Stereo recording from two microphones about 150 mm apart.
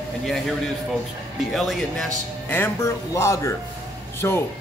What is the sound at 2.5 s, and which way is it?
A man's voice, 15° left (ahead or behind).